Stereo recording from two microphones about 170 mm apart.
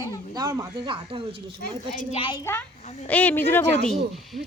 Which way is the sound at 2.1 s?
30° left (ahead or behind).